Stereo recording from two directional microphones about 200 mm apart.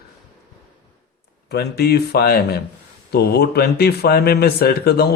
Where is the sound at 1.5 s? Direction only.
50° left (ahead or behind).